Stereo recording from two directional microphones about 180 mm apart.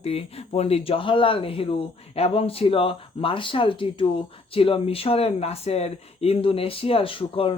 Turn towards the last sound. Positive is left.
turn(degrees=30)  # may be behind; listen again after turning